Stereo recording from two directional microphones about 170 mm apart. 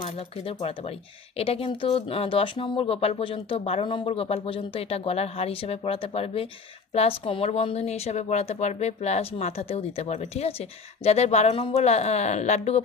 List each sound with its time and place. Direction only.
0.0 s speech: 35° left (ahead or behind)